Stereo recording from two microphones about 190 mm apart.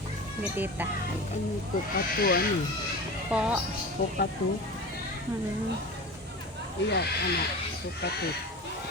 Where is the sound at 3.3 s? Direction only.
5° right (ahead or behind).